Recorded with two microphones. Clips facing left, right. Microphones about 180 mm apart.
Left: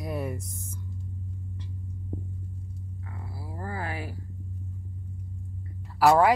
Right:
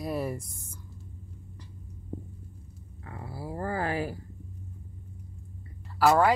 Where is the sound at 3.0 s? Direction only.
55° right (ahead or behind).